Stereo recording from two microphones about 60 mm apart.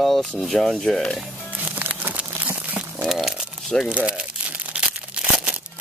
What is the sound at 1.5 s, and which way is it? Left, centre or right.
Music, right.